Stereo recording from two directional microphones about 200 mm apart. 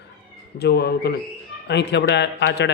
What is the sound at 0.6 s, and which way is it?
A man's voice, 55° left (ahead or behind).